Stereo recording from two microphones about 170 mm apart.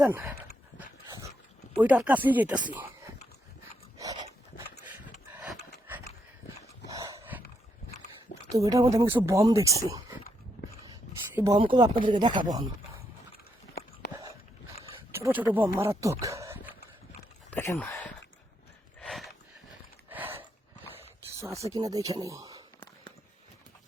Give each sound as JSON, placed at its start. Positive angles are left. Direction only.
{"t": 0.0, "sound": "speech", "side_deg": -10}
{"t": 1.7, "sound": "speech", "side_deg": -10}
{"t": 3.9, "sound": "dog", "side_deg": -20}
{"t": 5.9, "sound": "a sound", "side_deg": -10}
{"t": 6.8, "sound": "dog", "side_deg": -20}
{"t": 8.4, "sound": "speech", "side_deg": -20}
{"t": 10.6, "sound": "dog", "side_deg": 90}
{"t": 11.5, "sound": "speech", "side_deg": -30}
{"t": 15.1, "sound": "speech", "side_deg": -10}
{"t": 17.5, "sound": "a sound", "side_deg": 10}
{"t": 20.1, "sound": "a sound", "side_deg": -10}
{"t": 21.4, "sound": "speech", "side_deg": -20}